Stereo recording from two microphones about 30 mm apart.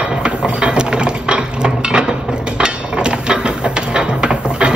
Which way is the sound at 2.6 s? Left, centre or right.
Right.